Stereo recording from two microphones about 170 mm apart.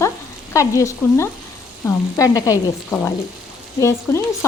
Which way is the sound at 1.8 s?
20° left (ahead or behind).